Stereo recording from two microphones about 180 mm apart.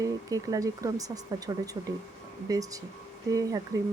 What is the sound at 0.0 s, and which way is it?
Speech, 20° right (ahead or behind).